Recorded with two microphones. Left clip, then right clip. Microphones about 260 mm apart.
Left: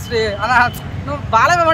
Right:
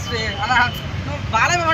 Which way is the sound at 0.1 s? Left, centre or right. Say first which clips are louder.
Left 4 dB; centre.